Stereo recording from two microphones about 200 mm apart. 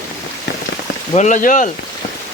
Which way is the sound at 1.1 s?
35° left (ahead or behind).